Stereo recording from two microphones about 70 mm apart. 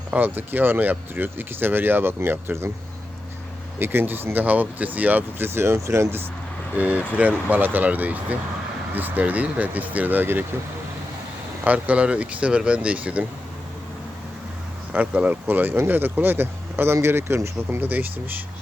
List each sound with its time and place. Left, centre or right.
0.1 s speech: right
3.8 s speech: right
5.5 s speech: right
6.7 s speech: right
11.6 s speech: right
14.9 s speech: right